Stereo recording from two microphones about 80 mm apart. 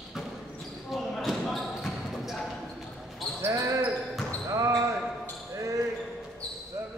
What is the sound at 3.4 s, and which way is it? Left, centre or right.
Basketball bounce, right.